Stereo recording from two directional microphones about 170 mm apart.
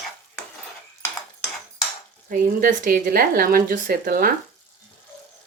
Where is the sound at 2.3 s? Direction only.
60° right (ahead or behind).